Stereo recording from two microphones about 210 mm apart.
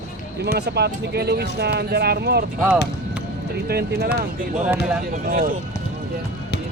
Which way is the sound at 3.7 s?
50° right (ahead or behind).